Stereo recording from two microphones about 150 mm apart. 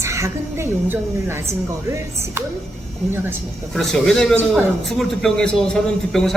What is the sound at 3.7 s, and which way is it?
A man's voice, centre (ahead or behind).